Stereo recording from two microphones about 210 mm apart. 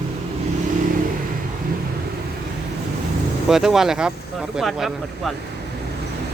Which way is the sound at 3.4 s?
Centre (ahead or behind).